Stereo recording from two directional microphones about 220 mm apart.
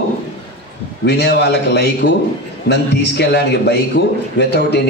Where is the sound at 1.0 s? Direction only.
45° left (ahead or behind).